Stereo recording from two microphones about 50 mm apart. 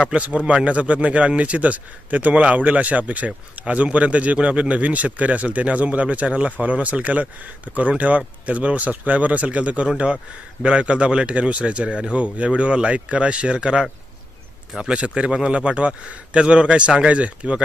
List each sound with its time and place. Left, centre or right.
0.0 s a man's voice: right